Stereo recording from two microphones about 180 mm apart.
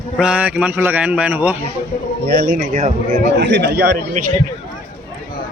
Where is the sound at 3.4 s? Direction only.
75° right (ahead or behind); by 4.2 s 60° right (ahead or behind).